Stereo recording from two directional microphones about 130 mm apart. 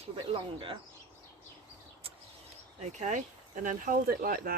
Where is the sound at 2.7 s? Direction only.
60° right (ahead or behind); by 4.5 s 90° right.